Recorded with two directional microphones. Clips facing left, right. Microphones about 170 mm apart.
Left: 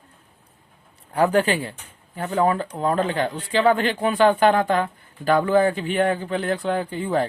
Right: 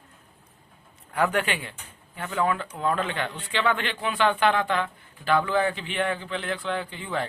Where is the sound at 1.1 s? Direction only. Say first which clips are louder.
Left 6 dB; 35° left (ahead or behind).